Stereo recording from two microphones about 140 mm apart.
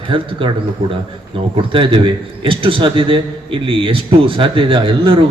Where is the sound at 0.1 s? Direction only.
40° right (ahead or behind).